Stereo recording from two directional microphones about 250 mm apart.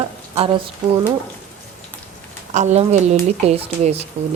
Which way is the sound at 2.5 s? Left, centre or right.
Right.